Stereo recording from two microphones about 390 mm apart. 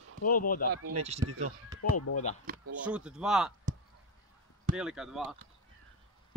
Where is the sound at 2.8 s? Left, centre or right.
Centre.